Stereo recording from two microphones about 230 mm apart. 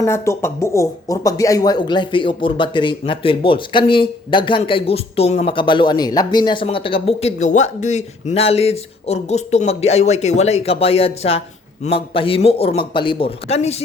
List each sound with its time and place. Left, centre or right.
0.0 s speech: centre; by 13.8 s left